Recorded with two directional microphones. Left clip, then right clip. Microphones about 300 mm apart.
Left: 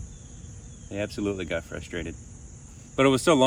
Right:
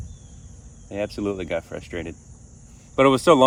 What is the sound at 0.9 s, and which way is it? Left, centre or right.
Speech, centre.